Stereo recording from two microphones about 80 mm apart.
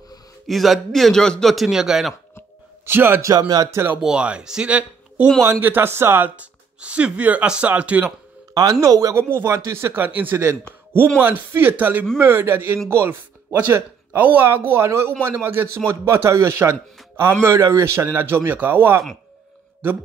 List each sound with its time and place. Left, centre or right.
0.5 s a man's voice: centre
2.8 s a man's voice: right
3.3 s speech: right
3.6 s speech: right
4.0 s speech: centre
8.8 s speech: right
10.0 s speech: right